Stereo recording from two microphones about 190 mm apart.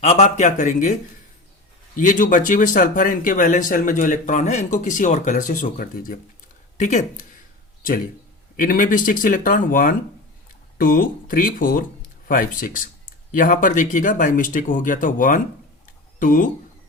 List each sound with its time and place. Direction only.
0.0 s speech: 35° left (ahead or behind)
2.0 s speech: 40° left (ahead or behind)
8.5 s speech: 45° left (ahead or behind)